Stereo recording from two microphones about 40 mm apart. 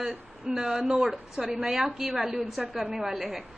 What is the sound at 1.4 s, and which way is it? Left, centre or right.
A woman's voice, right.